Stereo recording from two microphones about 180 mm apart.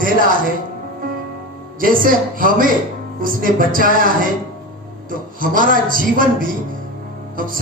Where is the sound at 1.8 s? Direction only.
50° right (ahead or behind).